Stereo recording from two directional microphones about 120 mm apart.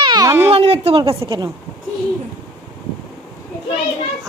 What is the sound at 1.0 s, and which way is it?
Speech, 40° right (ahead or behind).